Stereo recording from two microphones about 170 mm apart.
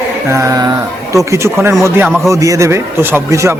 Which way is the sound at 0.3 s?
15° right (ahead or behind).